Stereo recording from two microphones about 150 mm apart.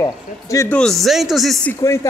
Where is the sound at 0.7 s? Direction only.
5° left (ahead or behind).